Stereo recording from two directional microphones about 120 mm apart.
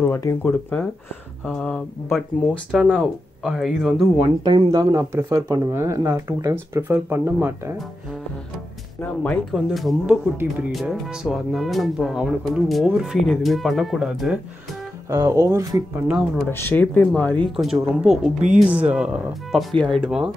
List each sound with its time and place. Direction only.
0.0 s speech: 20° left (ahead or behind)
0.4 s speech: 10° left (ahead or behind)
4.6 s speech: 30° right (ahead or behind)
9.0 s speech: 15° left (ahead or behind)
9.5 s speech: centre (ahead or behind)
10.0 s speech: 10° right (ahead or behind)
15.0 s speech: 25° right (ahead or behind)
16.1 s speech: 5° right (ahead or behind)
16.4 s speech: 20° left (ahead or behind)
17.6 s speech: centre (ahead or behind)